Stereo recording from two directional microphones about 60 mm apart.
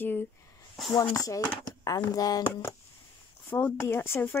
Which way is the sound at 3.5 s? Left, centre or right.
Left.